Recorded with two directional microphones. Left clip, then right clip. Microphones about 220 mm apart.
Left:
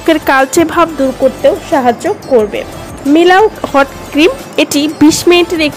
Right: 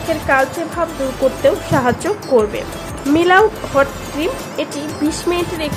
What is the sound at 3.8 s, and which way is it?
Speech, 40° left (ahead or behind).